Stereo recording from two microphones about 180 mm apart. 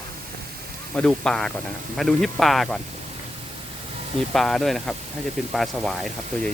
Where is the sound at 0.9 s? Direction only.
5° left (ahead or behind).